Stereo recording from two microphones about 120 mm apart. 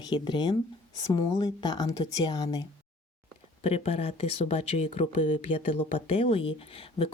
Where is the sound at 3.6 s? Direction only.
60° left (ahead or behind).